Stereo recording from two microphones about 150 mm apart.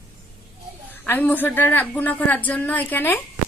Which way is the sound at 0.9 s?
10° left (ahead or behind).